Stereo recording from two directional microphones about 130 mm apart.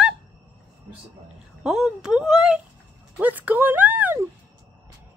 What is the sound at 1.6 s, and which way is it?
Speech, 5° right (ahead or behind).